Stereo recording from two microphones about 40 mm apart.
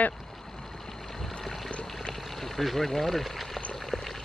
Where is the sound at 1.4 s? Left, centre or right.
Centre.